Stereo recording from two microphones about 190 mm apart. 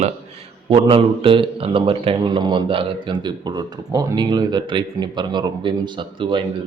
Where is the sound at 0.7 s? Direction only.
30° right (ahead or behind).